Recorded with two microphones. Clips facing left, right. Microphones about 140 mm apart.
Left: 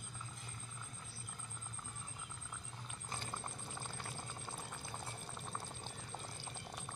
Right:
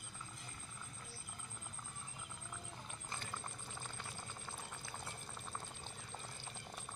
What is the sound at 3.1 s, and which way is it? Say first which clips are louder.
Boiling: left 2 dB; 20° left (ahead or behind).